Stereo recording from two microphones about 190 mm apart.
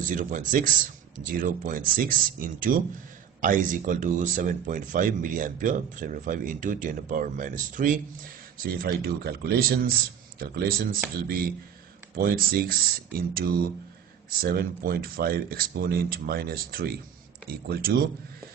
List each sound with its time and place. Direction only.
0.0 s speech: 40° right (ahead or behind)